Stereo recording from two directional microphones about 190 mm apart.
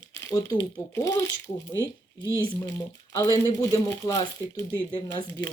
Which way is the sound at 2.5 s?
15° left (ahead or behind).